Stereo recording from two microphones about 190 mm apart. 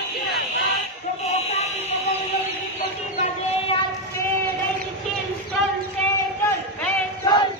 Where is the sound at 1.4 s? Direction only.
35° left (ahead or behind).